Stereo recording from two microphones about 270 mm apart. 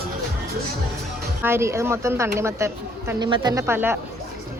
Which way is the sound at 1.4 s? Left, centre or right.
Centre.